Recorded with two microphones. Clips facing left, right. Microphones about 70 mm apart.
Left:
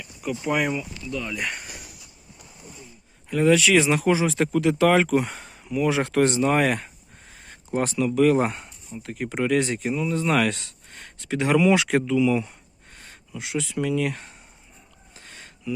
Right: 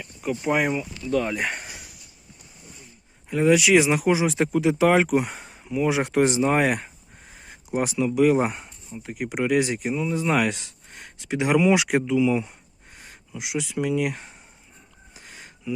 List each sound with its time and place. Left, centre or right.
0.0 s speech: right
1.1 s speech: right
3.2 s speech: centre
15.1 s a sound: centre